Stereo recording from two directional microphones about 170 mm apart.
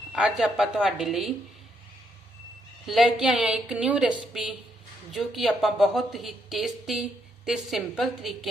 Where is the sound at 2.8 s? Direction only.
Centre (ahead or behind).